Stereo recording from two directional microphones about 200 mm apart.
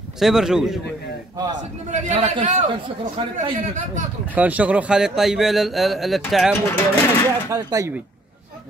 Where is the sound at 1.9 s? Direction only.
35° right (ahead or behind).